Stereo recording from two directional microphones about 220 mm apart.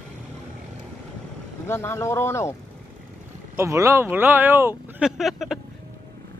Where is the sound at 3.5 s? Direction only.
15° right (ahead or behind).